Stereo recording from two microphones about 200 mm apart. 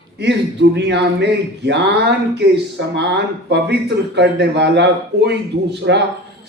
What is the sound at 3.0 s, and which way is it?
A man's voice, 60° right (ahead or behind).